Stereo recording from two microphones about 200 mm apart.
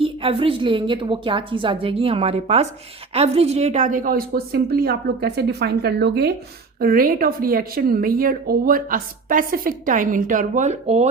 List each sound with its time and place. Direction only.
0.0 s a woman's voice: 25° right (ahead or behind)